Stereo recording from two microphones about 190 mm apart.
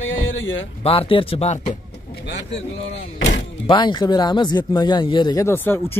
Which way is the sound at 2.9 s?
30° left (ahead or behind).